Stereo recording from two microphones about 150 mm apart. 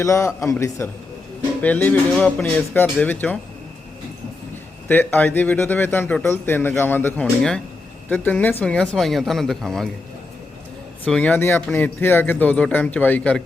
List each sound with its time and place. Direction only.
0.0 s a man's voice: 20° left (ahead or behind)
4.9 s a man's voice: 10° left (ahead or behind)
11.0 s a man's voice: 10° left (ahead or behind)